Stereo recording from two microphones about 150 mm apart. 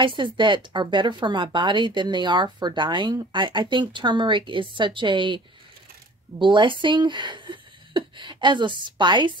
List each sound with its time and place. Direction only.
0.0 s speech: 30° right (ahead or behind)